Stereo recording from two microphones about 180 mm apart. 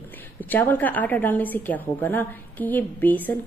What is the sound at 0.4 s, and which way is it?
A woman's voice, 10° left (ahead or behind).